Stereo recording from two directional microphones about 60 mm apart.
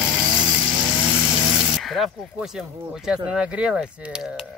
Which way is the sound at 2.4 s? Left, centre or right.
Centre.